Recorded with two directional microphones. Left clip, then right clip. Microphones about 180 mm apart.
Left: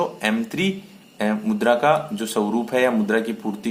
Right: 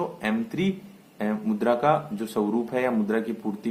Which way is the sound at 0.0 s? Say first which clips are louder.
Left 6 dB; 15° left (ahead or behind).